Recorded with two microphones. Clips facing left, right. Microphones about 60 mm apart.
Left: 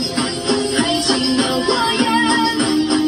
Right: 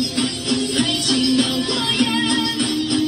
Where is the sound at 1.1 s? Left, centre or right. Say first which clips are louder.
Left 1 dB; left.